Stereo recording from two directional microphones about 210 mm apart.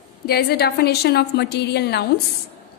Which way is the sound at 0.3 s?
50° left (ahead or behind).